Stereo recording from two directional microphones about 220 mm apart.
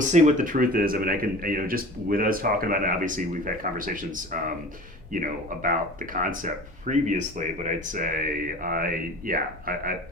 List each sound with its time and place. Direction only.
0.1 s speech: 35° right (ahead or behind)